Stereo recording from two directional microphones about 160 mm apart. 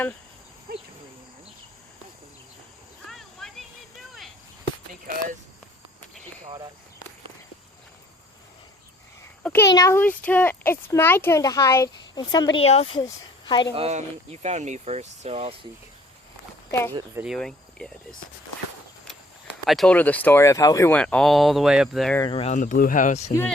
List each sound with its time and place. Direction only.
0.7 s cricket: 70° right (ahead or behind)
3.1 s a sound: centre (ahead or behind)
5.0 s speech: 55° right (ahead or behind)
9.4 s a sound: 10° left (ahead or behind)
9.6 s speech: 20° left (ahead or behind)
12.6 s speech: 40° left (ahead or behind)
13.0 s speech: 25° left (ahead or behind)
13.7 s speech: 40° right (ahead or behind)
17.3 s cricket: 5° left (ahead or behind)
19.6 s speech: centre (ahead or behind); by 20.9 s 20° left (ahead or behind)
20.9 s speech: 5° left (ahead or behind)
22.2 s speech: 35° left (ahead or behind)
22.5 s speech: 55° left (ahead or behind)